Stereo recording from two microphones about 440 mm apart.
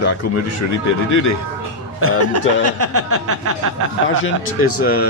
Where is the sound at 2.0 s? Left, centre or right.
Right.